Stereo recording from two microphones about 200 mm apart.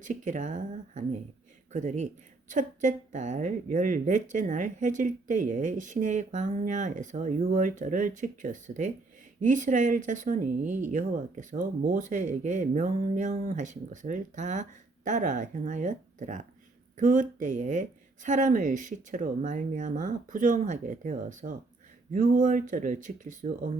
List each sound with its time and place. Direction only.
0.0 s speech: 40° right (ahead or behind)